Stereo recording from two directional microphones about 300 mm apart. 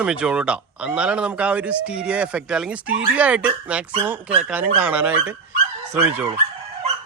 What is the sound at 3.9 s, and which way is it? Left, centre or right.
Speech, centre.